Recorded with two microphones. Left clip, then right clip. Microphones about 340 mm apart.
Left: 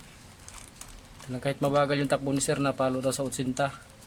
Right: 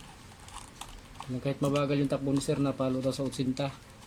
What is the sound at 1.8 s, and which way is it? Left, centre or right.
Speech, left.